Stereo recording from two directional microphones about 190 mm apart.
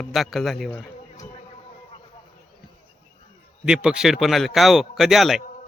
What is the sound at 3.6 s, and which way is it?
A man's voice, 5° right (ahead or behind).